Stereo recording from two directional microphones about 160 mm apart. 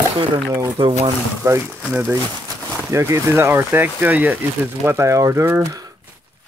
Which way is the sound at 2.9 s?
15° right (ahead or behind).